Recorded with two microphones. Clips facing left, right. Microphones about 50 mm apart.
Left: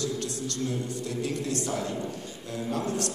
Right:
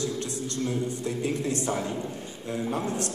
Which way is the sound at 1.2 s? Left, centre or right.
Right.